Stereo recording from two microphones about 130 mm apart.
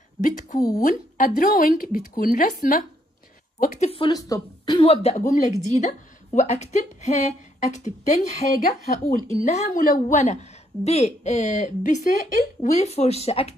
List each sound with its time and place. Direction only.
0.2 s speech: 75° left (ahead or behind)
0.6 s speech: 30° left (ahead or behind)
0.8 s speech: 90° left
3.6 s speech: 70° left (ahead or behind)
4.1 s speech: 30° left (ahead or behind)
4.8 s a woman's voice: 55° left (ahead or behind)
9.0 s a woman's voice: 75° left (ahead or behind); by 13.6 s 50° left (ahead or behind)